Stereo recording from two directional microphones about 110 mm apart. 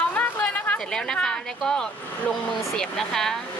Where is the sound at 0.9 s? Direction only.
5° left (ahead or behind).